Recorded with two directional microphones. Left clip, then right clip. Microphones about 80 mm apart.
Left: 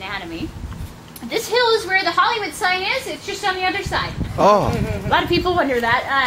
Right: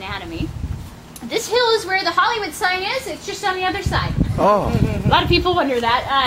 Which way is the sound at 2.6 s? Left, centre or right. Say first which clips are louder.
Left 1 dB; centre.